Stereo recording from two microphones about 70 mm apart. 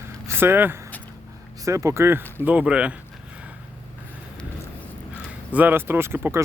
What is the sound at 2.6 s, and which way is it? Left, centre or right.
Speech, centre.